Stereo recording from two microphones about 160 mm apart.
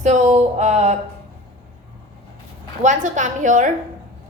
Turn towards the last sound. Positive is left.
turn(degrees=-50)  # may be behind; listen again after turning